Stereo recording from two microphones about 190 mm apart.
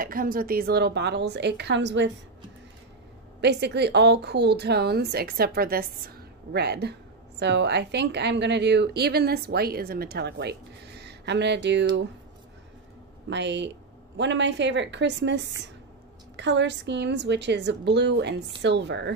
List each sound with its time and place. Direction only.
0.0 s a woman's voice: 50° right (ahead or behind); by 2.0 s 70° right (ahead or behind)
3.3 s a woman's voice: 60° right (ahead or behind)
13.3 s a woman's voice: 65° right (ahead or behind)